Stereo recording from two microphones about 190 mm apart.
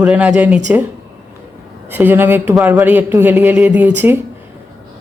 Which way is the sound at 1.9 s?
10° right (ahead or behind).